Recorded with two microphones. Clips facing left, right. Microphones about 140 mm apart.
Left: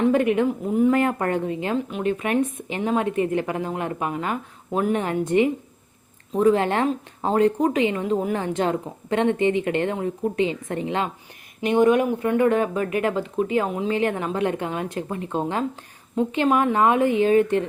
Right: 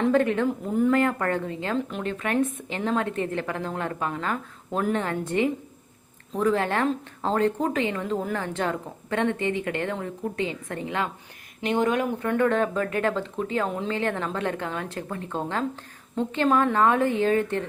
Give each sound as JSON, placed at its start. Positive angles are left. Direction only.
{"t": 0.1, "sound": "speech", "side_deg": 15}